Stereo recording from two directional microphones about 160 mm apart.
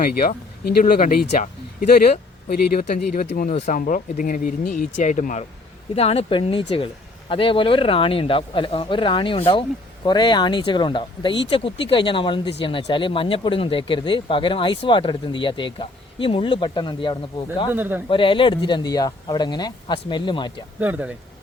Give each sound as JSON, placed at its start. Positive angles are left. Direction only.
{"t": 0.0, "sound": "speech", "side_deg": 65}
{"t": 2.9, "sound": "speech", "side_deg": 70}
{"t": 6.0, "sound": "speech", "side_deg": 40}
{"t": 17.7, "sound": "speech", "side_deg": -10}
{"t": 18.1, "sound": "speech", "side_deg": 30}
{"t": 20.7, "sound": "speech", "side_deg": -10}